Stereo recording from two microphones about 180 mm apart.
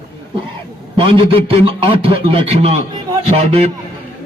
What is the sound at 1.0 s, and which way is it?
A man's voice, 30° right (ahead or behind).